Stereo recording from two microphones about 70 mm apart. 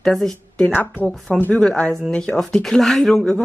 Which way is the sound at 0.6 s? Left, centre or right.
Left.